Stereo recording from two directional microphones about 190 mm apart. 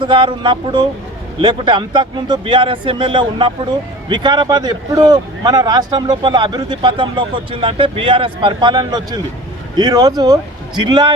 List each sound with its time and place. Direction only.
0.0 s speech: 25° right (ahead or behind)